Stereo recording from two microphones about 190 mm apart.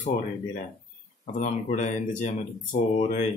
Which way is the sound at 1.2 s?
40° left (ahead or behind).